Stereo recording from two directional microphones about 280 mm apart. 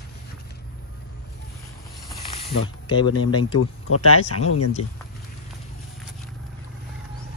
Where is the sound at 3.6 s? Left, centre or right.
Left.